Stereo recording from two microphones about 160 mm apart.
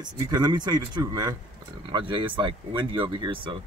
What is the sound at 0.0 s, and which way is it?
Speech, 25° right (ahead or behind).